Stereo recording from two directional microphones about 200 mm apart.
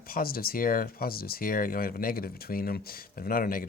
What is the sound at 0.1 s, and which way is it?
Speech, 45° left (ahead or behind).